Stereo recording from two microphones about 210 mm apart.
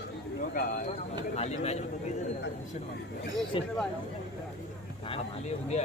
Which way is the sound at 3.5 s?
25° left (ahead or behind).